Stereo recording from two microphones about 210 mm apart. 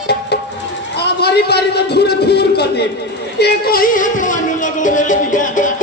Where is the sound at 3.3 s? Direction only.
50° left (ahead or behind).